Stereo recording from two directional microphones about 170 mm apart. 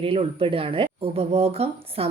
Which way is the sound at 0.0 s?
35° right (ahead or behind).